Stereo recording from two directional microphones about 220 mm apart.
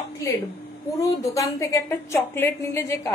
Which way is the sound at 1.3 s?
15° left (ahead or behind).